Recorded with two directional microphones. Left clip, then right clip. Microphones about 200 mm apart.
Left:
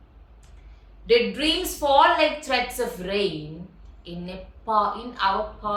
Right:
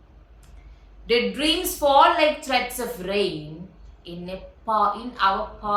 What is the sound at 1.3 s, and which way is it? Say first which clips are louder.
A woman's voice: right 1 dB; centre (ahead or behind).